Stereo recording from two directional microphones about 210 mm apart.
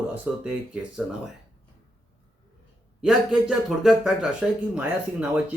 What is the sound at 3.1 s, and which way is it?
Speech, centre (ahead or behind).